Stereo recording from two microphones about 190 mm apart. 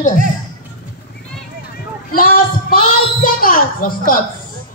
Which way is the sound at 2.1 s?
50° left (ahead or behind).